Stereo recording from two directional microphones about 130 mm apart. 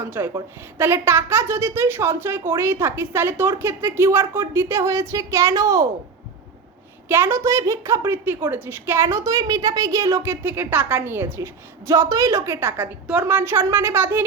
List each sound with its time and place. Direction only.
0.0 s a woman's voice: 20° right (ahead or behind)
7.1 s a woman's voice: 20° right (ahead or behind)